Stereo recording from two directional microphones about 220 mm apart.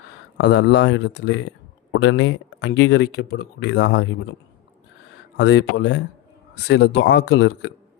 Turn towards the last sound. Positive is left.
turn(degrees=50)  # may be behind; listen again after turning